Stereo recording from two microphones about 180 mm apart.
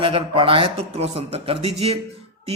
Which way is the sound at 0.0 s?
30° right (ahead or behind).